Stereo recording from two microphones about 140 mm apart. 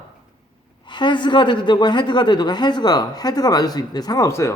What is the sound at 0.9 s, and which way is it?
A man's voice, 35° left (ahead or behind).